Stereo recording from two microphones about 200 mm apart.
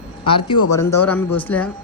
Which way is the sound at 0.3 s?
25° left (ahead or behind).